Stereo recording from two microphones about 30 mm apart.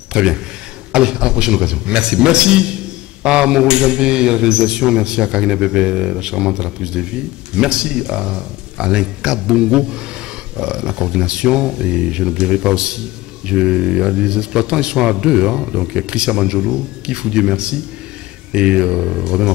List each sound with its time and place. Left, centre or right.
0.1 s a man's voice: right